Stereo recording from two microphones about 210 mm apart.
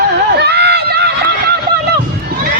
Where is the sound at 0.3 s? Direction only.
50° right (ahead or behind).